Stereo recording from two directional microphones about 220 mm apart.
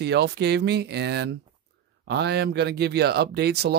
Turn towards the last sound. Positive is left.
turn(degrees=-50)  # may be behind; listen again after turning